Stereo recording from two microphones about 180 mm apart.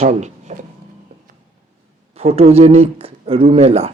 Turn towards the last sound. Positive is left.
turn(degrees=-35)  # may be behind; listen again after turning